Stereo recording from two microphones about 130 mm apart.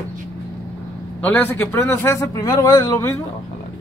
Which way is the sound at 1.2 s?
15° left (ahead or behind).